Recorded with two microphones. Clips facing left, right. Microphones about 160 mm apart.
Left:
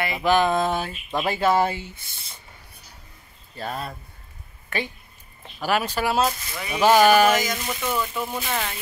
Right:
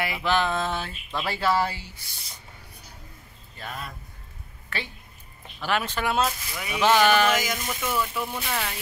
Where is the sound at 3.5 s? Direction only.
35° left (ahead or behind).